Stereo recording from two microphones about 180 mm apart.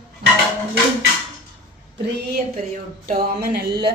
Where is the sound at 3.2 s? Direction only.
60° right (ahead or behind).